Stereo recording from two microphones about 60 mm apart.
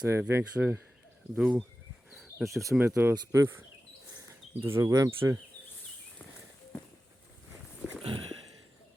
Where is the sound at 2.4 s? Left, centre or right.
Centre.